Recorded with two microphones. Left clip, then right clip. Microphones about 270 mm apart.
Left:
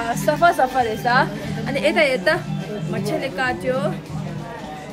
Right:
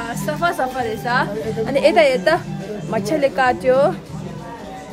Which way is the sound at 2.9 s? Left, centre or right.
Right.